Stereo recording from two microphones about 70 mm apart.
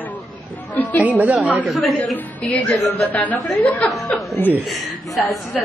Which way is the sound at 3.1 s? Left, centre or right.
Left.